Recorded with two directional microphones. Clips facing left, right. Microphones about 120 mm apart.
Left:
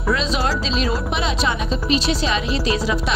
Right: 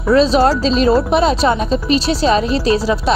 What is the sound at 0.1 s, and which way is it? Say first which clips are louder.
Speech: right 10 dB; 35° right (ahead or behind).